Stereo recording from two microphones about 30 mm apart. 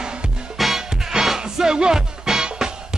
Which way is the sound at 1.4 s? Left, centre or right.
Right.